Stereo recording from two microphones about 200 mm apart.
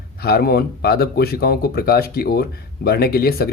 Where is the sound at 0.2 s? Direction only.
50° left (ahead or behind).